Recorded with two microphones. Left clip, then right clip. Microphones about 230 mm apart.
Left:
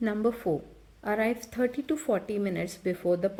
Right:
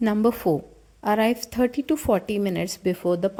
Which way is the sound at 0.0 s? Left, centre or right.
Right.